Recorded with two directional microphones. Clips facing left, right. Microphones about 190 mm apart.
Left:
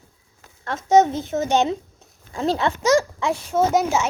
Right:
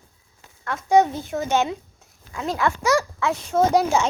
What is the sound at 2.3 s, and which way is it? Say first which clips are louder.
Speech: left 2 dB; 30° left (ahead or behind).